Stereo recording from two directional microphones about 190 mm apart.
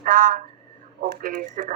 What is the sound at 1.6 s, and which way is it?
Speech, 45° right (ahead or behind).